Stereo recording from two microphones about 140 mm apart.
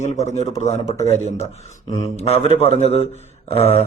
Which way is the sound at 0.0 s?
55° left (ahead or behind).